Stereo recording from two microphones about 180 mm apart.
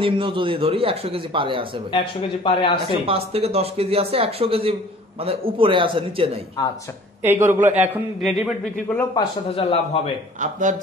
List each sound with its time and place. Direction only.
0.0 s a man's voice: 30° right (ahead or behind)
1.9 s a man's voice: 30° left (ahead or behind)
3.1 s a man's voice: 35° right (ahead or behind)
6.6 s a man's voice: 20° left (ahead or behind)
7.2 s a man's voice: 15° right (ahead or behind)
8.2 s speech: centre (ahead or behind)
9.1 s speech: 30° left (ahead or behind)
10.4 s speech: 45° right (ahead or behind)